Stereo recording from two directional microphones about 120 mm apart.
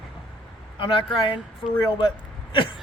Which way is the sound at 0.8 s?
45° left (ahead or behind).